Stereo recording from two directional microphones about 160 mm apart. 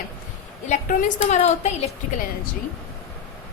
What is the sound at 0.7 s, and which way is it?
A woman's voice, 50° left (ahead or behind).